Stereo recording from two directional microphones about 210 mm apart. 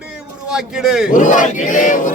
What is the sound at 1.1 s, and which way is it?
Battle cry, 35° left (ahead or behind).